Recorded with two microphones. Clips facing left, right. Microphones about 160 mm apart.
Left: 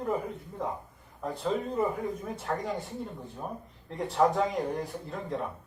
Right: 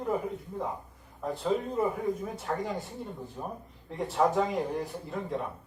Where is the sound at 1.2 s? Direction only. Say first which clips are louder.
Right 1 dB; centre (ahead or behind).